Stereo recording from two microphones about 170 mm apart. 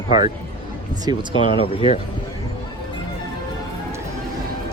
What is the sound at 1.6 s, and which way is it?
Speech, 35° left (ahead or behind).